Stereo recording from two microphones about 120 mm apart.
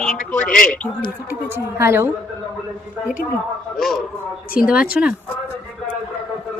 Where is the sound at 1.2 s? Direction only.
20° right (ahead or behind).